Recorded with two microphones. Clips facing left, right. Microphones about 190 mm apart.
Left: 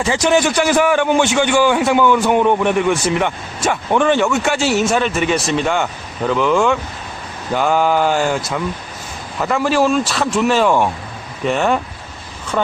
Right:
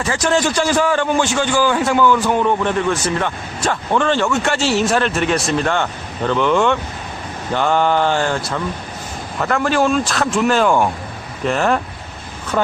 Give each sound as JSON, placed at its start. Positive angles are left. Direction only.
{"t": 0.0, "sound": "a man's voice", "side_deg": 20}
{"t": 9.4, "sound": "speech", "side_deg": 5}